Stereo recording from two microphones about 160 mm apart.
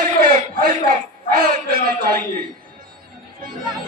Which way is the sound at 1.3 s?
60° right (ahead or behind).